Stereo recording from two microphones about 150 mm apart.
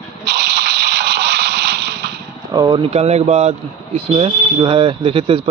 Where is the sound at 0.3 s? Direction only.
90° right.